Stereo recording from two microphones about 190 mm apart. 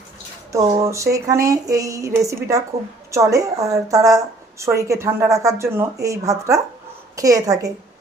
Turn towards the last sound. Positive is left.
turn(degrees=-20)  # may be behind; listen again after turning